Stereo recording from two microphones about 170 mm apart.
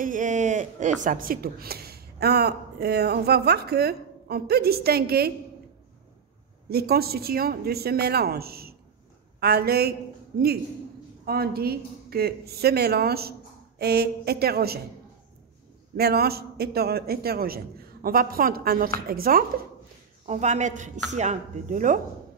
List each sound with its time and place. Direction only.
0.0 s speech: 50° right (ahead or behind); by 5.3 s 65° right (ahead or behind)
6.7 s a man's voice: 65° right (ahead or behind)
11.2 s a man's voice: 65° right (ahead or behind)
16.0 s a man's voice: 65° right (ahead or behind)
20.2 s speech: 45° right (ahead or behind)